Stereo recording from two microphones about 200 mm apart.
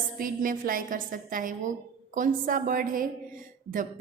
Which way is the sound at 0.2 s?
45° right (ahead or behind).